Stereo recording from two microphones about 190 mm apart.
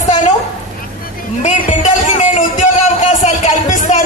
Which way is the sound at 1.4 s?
40° left (ahead or behind).